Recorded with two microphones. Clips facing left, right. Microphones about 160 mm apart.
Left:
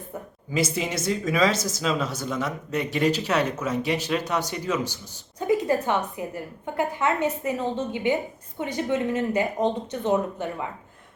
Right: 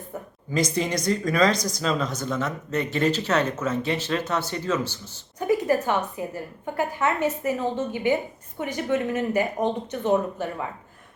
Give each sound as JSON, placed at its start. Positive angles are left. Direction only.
{"t": 0.5, "sound": "a woman's voice", "side_deg": 5}